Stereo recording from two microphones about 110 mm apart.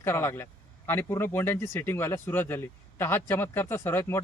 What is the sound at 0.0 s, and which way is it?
Speech, 20° left (ahead or behind).